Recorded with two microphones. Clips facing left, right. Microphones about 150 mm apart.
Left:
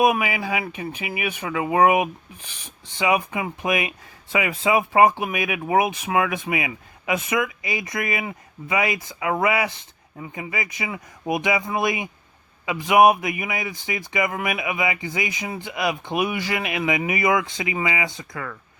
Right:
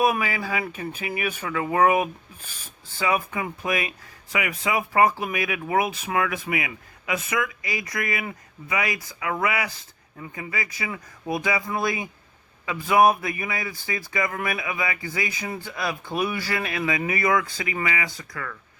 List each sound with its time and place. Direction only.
0.0 s speech: 15° left (ahead or behind)